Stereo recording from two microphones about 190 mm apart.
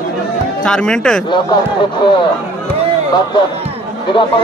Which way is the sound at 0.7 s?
5° left (ahead or behind).